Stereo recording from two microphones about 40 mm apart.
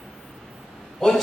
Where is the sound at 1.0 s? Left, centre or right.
Centre.